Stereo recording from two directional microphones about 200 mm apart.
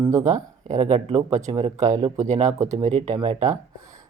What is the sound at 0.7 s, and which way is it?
Speech, 35° right (ahead or behind).